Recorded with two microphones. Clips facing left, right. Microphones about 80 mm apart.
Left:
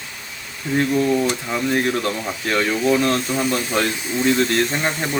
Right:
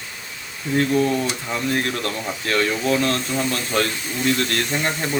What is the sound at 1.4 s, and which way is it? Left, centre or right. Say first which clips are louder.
Speech: left 3 dB; centre.